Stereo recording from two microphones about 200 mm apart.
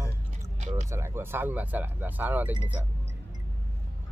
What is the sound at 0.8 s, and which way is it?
Speech, 15° right (ahead or behind).